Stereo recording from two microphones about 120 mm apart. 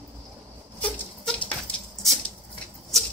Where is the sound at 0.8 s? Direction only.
10° left (ahead or behind).